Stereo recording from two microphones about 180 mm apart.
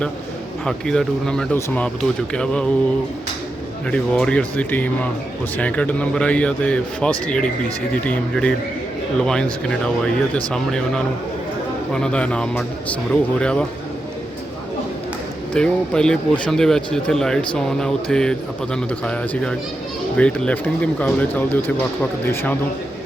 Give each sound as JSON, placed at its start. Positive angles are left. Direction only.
{"t": 0.6, "sound": "speech", "side_deg": 5}
{"t": 3.9, "sound": "a man's voice", "side_deg": 5}
{"t": 15.5, "sound": "a man's voice", "side_deg": 5}